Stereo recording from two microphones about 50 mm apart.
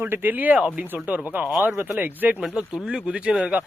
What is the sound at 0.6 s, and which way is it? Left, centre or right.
Speech, centre.